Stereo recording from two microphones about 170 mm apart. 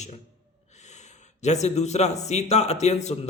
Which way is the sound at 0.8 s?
40° left (ahead or behind).